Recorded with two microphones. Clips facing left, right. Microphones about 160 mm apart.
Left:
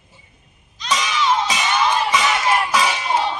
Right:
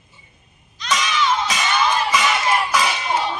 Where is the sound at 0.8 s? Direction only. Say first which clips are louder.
Even; 30° left (ahead or behind).